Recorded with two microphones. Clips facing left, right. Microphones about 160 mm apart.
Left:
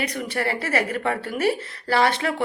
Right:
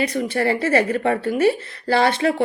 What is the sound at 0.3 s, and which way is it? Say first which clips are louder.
Speech: right 6 dB; 30° right (ahead or behind).